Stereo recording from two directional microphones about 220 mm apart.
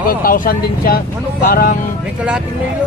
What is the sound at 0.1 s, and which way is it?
Speech, 40° left (ahead or behind).